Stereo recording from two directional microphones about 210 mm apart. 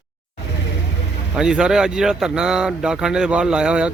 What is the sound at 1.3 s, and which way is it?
A man's voice, 5° right (ahead or behind).